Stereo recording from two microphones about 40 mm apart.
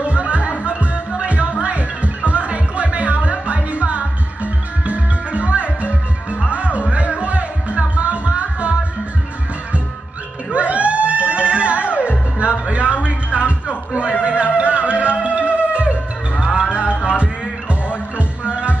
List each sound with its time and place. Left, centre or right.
0.0 s music: right
10.5 s music: right
12.9 s a sound: right
14.2 s music: right